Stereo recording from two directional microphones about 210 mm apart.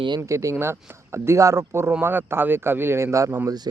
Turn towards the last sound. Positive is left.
turn(degrees=-15)  # may be behind; listen again after turning